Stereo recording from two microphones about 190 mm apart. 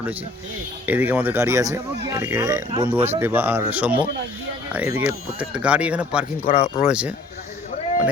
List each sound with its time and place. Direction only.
0.9 s a man's voice: 10° right (ahead or behind)
6.4 s speech: 35° left (ahead or behind)
6.8 s speech: 5° right (ahead or behind)